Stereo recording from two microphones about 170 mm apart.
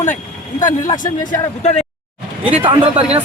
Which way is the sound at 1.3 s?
40° left (ahead or behind).